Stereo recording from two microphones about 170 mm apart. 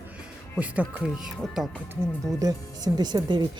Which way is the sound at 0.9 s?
5° right (ahead or behind).